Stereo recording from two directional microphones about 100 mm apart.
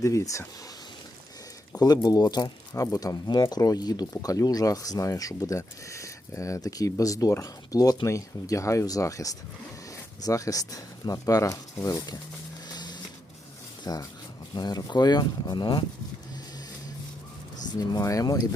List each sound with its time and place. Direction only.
0.0 s speech: 35° left (ahead or behind)
1.7 s speech: 40° left (ahead or behind)
12.6 s printer: 45° left (ahead or behind)
13.8 s speech: 40° left (ahead or behind)
17.7 s speech: 35° left (ahead or behind)